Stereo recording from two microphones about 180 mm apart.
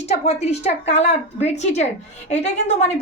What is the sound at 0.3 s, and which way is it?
A woman's voice, 35° left (ahead or behind).